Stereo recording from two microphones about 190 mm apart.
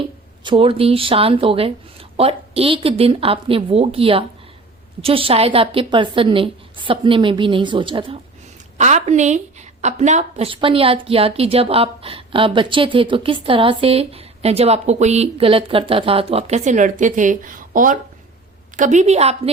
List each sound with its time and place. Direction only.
0.4 s speech: 30° right (ahead or behind)
8.8 s a woman's voice: 35° right (ahead or behind)